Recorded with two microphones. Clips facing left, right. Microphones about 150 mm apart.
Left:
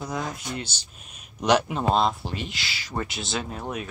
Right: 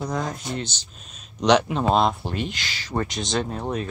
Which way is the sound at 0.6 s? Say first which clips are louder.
Right 4 dB; 10° left (ahead or behind).